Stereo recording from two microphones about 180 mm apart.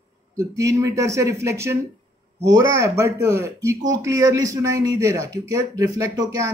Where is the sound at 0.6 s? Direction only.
15° right (ahead or behind).